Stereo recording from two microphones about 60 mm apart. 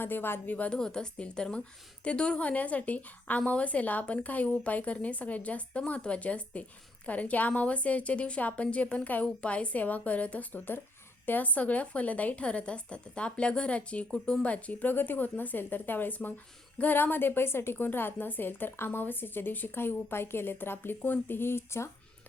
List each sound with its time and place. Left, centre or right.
0.0 s a woman's voice: left
0.5 s a woman's voice: left
0.8 s a woman's voice: centre; by 21.8 s left